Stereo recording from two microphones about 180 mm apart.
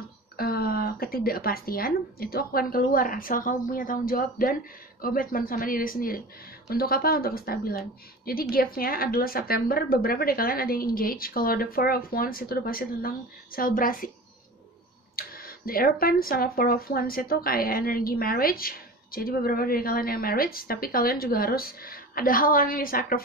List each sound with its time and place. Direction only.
0.4 s speech: 55° left (ahead or behind)
15.1 s speech: 55° left (ahead or behind)